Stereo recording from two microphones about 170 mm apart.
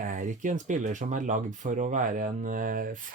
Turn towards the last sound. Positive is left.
turn(degrees=-55)  # may be behind; listen again after turning